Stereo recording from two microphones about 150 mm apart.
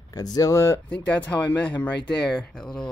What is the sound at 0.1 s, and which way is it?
Speech, 25° left (ahead or behind).